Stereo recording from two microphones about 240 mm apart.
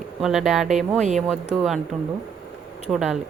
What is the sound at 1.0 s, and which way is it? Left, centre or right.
Speech, right.